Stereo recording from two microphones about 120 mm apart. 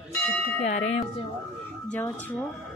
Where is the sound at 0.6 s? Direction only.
75° left (ahead or behind).